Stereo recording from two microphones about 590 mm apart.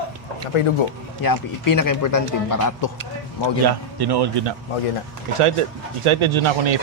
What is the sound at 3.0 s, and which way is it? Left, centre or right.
Speech, right.